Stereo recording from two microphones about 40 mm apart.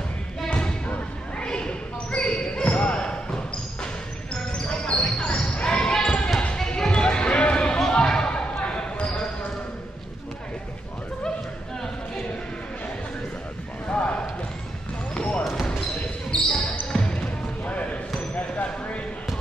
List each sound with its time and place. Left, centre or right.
0.5 s thump: left
1.4 s basketball bounce: left
4.5 s basketball bounce: left
13.8 s basketball bounce: left
15.1 s basketball bounce: left
17.0 s basketball bounce: left